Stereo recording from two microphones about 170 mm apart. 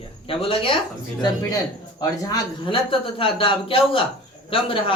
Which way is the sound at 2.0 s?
25° left (ahead or behind).